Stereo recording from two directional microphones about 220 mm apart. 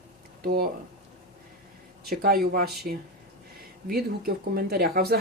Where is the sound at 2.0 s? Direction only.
40° right (ahead or behind).